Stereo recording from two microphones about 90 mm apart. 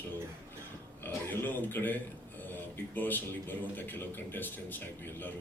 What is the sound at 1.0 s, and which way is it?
Speech, 20° left (ahead or behind).